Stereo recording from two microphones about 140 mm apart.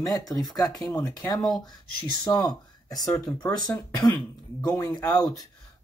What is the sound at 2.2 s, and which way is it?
Speech, 25° left (ahead or behind).